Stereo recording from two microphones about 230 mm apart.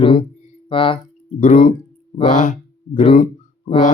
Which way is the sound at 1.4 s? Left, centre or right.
Left.